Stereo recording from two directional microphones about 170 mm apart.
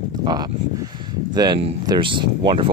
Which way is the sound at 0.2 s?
25° right (ahead or behind).